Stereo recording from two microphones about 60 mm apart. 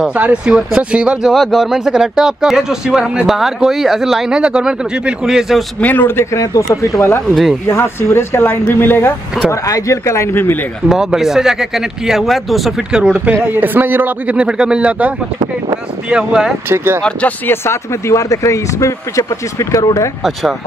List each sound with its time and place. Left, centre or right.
0.1 s speech: right
1.3 s speech: centre
4.4 s speech: centre
5.8 s a man's voice: left
6.3 s speech: left
7.7 s speech: left
9.5 s speech: left
10.3 s speech: left
10.9 s speech: centre
12.9 s speech: centre
13.3 s speech: right; by 16.5 s centre
16.6 s speech: right
17.5 s speech: left